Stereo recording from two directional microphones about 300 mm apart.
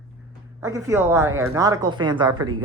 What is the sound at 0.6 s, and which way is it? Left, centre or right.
Speech, centre.